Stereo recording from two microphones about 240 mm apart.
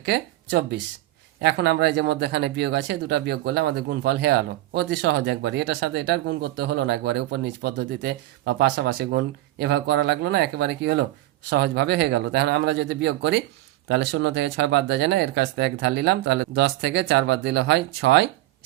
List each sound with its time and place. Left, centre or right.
0.0 s speech: right